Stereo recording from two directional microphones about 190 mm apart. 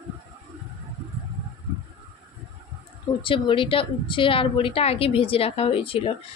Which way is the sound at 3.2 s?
25° left (ahead or behind).